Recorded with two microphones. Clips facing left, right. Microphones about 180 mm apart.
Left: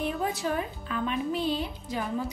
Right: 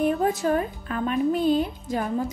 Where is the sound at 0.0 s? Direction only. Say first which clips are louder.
Right 7 dB; 45° right (ahead or behind).